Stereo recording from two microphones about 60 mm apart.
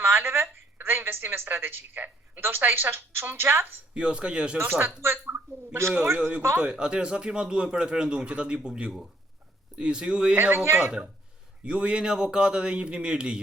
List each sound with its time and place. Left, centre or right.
0.0 s a woman's voice: right
3.9 s speech: centre
4.5 s speech: right
5.2 s a sound: right
6.1 s a man's voice: centre
10.3 s speech: right
11.6 s speech: centre